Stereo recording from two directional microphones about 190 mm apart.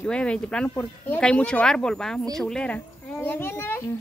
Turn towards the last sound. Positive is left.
turn(degrees=10)  # may be behind; listen again after turning